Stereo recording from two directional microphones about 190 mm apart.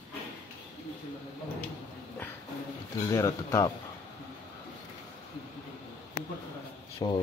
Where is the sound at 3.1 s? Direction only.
15° left (ahead or behind).